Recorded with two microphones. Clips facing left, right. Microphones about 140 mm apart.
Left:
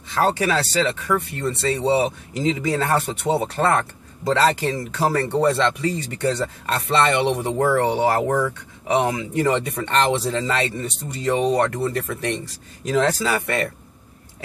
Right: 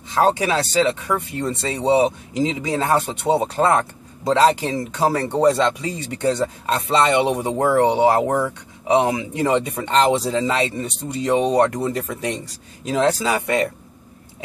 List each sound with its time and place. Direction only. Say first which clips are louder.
0.1 s speech: right 2 dB; 20° right (ahead or behind)